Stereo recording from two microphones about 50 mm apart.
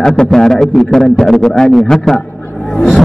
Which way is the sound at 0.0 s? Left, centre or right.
Centre.